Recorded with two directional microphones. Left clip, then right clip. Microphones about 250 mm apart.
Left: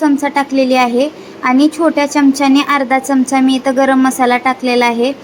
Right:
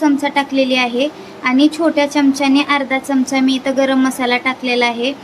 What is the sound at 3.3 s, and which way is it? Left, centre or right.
A woman's voice, centre.